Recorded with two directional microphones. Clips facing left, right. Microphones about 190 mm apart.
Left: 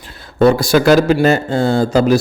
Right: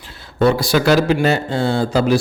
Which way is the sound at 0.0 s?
50° left (ahead or behind).